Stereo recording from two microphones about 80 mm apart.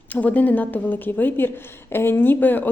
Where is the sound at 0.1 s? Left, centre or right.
Centre.